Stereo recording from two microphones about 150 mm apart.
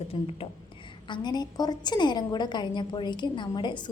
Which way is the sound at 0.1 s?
35° left (ahead or behind).